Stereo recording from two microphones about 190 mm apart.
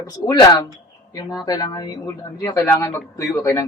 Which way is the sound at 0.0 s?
20° left (ahead or behind).